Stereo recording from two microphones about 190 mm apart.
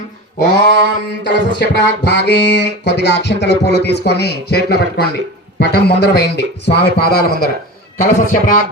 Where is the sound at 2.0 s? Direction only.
65° left (ahead or behind).